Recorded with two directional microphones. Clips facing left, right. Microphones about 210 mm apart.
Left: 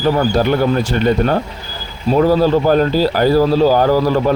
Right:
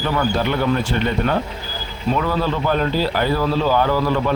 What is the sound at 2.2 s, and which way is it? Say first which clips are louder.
Speech: left 12 dB; 40° left (ahead or behind).